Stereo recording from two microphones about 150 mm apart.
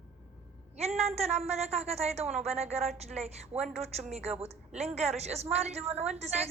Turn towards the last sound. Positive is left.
turn(degrees=-45)  # may be behind; listen again after turning